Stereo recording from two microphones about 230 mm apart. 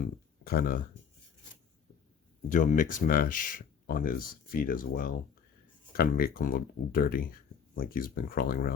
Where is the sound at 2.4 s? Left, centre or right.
Left.